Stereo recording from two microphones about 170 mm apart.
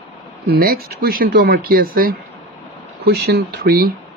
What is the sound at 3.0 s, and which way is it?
Speech, 75° right (ahead or behind).